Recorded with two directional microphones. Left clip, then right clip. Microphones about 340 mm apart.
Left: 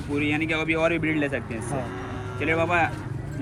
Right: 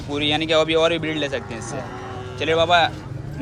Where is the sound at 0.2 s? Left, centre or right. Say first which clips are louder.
Right 7 dB; centre.